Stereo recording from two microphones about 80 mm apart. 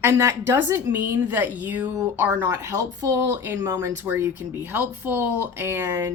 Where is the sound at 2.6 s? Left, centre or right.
Right.